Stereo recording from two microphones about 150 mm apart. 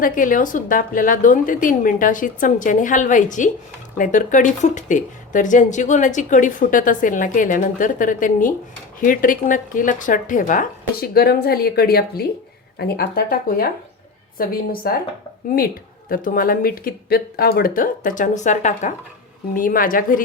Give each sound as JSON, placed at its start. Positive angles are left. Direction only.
{"t": 0.0, "sound": "a woman's voice", "side_deg": 65}
{"t": 14.3, "sound": "a woman's voice", "side_deg": 80}
{"t": 19.5, "sound": "a woman's voice", "side_deg": 65}